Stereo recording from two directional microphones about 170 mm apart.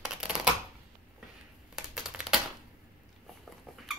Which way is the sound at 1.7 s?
5° right (ahead or behind).